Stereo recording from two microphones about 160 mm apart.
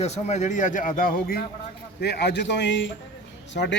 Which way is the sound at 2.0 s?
90° left.